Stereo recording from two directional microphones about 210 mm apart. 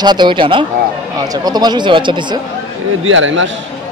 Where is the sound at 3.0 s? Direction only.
65° right (ahead or behind).